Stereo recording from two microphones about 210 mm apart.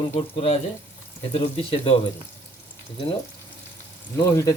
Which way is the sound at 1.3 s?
25° left (ahead or behind).